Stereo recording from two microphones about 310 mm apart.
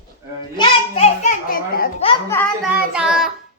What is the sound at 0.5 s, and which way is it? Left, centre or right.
A child's voice, left.